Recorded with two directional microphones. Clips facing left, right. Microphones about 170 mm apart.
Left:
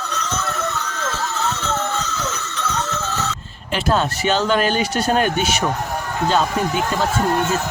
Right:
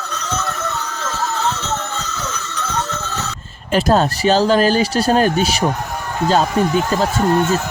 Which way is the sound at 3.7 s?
40° right (ahead or behind).